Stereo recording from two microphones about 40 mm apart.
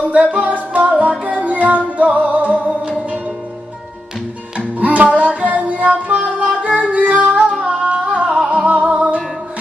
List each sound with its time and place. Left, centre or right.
0.1 s music: right
4.7 s music: right